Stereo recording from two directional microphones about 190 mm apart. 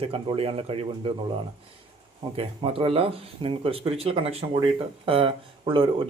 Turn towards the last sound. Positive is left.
turn(degrees=-25)  # may be behind; listen again after turning